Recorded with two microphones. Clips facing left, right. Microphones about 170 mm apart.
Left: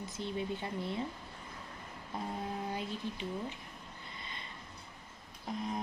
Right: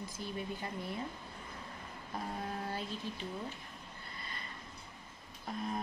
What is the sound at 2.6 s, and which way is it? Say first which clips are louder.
Speech: left 2 dB; 15° left (ahead or behind).